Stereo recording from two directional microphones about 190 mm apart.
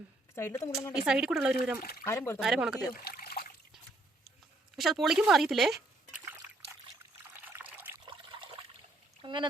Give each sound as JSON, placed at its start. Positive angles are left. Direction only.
{"t": 0.3, "sound": "a woman's voice", "side_deg": 15}
{"t": 1.0, "sound": "speech", "side_deg": -5}
{"t": 2.0, "sound": "a woman's voice", "side_deg": 15}
{"t": 2.4, "sound": "speech", "side_deg": -5}
{"t": 2.9, "sound": "trickle", "side_deg": 55}
{"t": 4.8, "sound": "speech", "side_deg": 0}
{"t": 7.4, "sound": "trickle", "side_deg": -10}
{"t": 8.0, "sound": "trickle", "side_deg": -25}
{"t": 9.2, "sound": "speech", "side_deg": -25}